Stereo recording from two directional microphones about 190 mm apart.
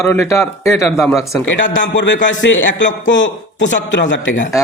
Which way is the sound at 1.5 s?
70° left (ahead or behind).